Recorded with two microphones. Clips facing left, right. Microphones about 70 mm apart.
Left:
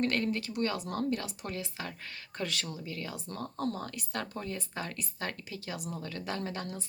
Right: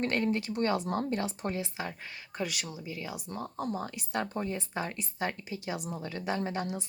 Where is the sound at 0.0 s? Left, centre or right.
Right.